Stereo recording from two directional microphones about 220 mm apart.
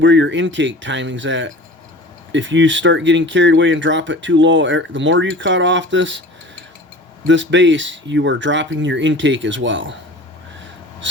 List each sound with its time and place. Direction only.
0.0 s speech: 55° right (ahead or behind)
7.3 s speech: 55° right (ahead or behind)
11.0 s speech: 55° right (ahead or behind)